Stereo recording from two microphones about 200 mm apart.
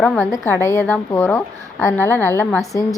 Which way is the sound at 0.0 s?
5° left (ahead or behind).